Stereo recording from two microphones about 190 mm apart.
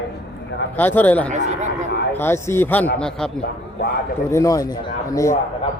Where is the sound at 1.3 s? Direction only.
40° right (ahead or behind).